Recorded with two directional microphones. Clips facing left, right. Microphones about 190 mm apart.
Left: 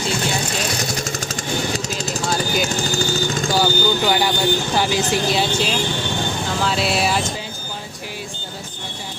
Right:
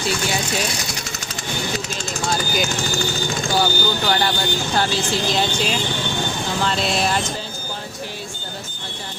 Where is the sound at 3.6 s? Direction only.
10° left (ahead or behind).